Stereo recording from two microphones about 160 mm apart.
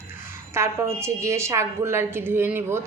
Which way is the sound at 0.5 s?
15° right (ahead or behind).